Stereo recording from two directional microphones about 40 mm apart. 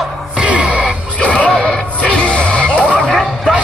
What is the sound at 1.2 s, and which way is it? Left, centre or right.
Music, left.